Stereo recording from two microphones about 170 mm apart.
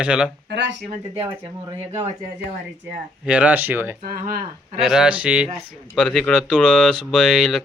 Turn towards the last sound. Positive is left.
turn(degrees=5)  # may be behind; listen again after turning